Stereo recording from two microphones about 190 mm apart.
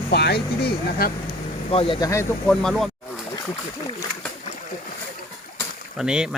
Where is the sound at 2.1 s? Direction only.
15° left (ahead or behind).